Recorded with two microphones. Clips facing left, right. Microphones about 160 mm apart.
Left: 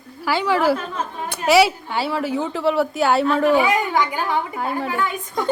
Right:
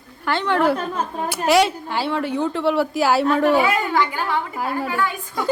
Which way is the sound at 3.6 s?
15° left (ahead or behind).